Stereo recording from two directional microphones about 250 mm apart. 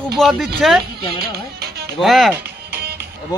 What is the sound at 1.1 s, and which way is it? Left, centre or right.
Music, right.